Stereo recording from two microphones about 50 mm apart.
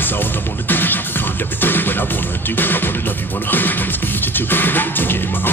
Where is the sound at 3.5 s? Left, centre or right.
Left.